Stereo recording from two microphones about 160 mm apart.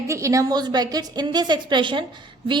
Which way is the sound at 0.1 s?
20° right (ahead or behind).